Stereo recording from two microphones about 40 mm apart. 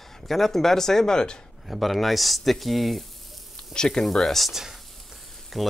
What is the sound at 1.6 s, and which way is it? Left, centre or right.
Speech, centre.